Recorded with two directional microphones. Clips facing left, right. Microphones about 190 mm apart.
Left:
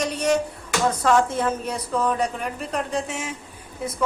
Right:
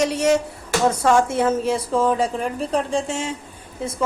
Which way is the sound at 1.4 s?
25° right (ahead or behind).